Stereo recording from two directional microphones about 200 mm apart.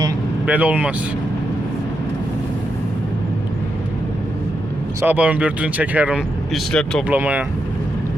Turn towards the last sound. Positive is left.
turn(degrees=-10)  # may be behind; listen again after turning